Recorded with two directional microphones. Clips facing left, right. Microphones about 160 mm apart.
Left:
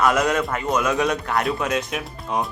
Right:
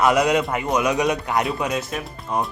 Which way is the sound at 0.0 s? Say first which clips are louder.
Right 2 dB; 15° right (ahead or behind).